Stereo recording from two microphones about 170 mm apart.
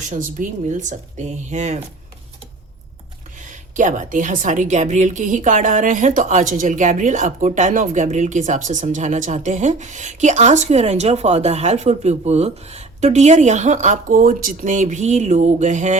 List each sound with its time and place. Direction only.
0.0 s a woman's voice: 50° right (ahead or behind)
3.4 s a woman's voice: 50° right (ahead or behind)